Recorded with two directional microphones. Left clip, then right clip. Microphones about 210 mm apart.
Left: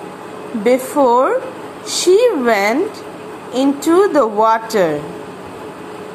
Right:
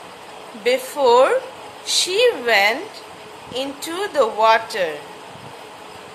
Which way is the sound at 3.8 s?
Centre (ahead or behind).